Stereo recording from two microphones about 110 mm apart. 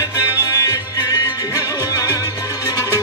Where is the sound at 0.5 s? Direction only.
35° left (ahead or behind).